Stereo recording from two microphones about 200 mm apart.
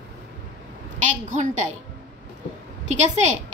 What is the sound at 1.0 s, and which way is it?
Speech, 35° right (ahead or behind).